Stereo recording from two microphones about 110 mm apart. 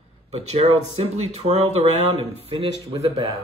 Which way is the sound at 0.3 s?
75° right (ahead or behind).